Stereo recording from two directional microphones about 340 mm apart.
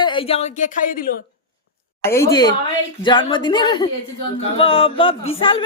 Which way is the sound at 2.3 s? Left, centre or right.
Centre.